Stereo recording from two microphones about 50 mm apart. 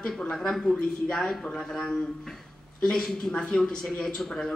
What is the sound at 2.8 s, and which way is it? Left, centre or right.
A man's voice, centre.